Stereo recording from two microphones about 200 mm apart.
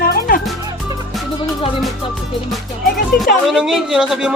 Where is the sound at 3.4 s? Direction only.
Centre (ahead or behind).